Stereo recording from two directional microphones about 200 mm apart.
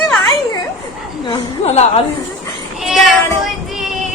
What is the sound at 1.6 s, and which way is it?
Speech, 30° left (ahead or behind).